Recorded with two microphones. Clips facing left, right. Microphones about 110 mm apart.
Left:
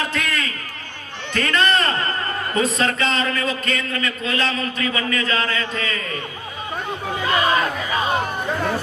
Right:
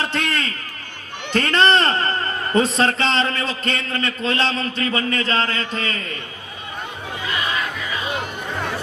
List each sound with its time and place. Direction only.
0.0 s a sound: 30° right (ahead or behind)
2.6 s a man's voice: 30° right (ahead or behind)
7.3 s music: 45° left (ahead or behind)